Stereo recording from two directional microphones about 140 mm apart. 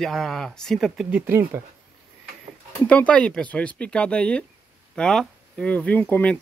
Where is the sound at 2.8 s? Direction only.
10° left (ahead or behind).